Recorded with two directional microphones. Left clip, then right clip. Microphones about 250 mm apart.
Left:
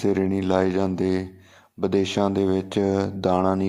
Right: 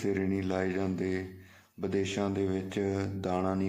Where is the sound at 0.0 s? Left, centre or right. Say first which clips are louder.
Left 9 dB; left.